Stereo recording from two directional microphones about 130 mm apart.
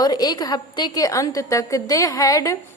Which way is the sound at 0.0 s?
30° left (ahead or behind).